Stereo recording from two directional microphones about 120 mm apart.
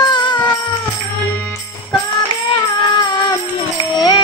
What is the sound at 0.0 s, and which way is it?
Music, 35° left (ahead or behind).